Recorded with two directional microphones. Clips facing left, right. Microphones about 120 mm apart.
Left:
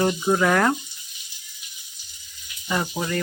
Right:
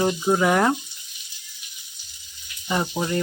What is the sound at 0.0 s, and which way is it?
Speech, 5° right (ahead or behind).